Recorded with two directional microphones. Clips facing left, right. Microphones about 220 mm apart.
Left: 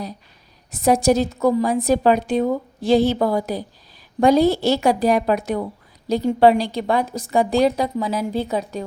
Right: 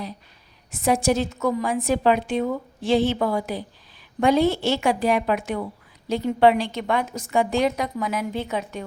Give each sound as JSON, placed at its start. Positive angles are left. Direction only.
{"t": 0.7, "sound": "a woman's voice", "side_deg": 40}